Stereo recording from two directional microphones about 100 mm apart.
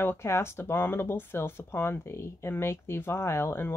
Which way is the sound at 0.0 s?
25° left (ahead or behind).